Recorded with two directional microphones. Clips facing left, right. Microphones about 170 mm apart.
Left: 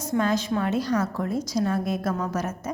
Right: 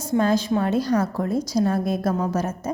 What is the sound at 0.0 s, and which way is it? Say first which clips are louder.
A woman's voice: right 4 dB; 30° right (ahead or behind).